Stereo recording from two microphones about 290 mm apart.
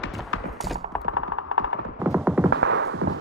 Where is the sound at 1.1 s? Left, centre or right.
Left.